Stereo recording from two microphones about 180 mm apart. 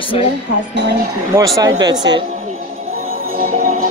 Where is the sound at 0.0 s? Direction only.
30° left (ahead or behind).